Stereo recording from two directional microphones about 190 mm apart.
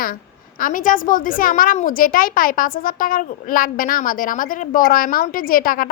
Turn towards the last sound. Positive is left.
turn(degrees=50)  # may be behind; listen again after turning